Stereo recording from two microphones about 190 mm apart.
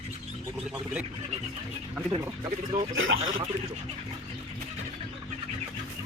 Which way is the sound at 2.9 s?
90° right.